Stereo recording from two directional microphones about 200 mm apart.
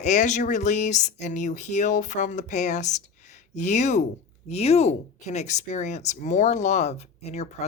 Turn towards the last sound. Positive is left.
turn(degrees=35)  # may be behind; listen again after turning